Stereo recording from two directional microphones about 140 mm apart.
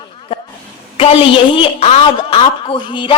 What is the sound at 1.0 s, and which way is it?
A woman's voice, 40° left (ahead or behind).